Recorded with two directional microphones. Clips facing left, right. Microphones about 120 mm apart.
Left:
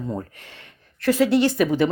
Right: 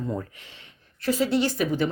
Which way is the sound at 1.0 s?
70° left (ahead or behind).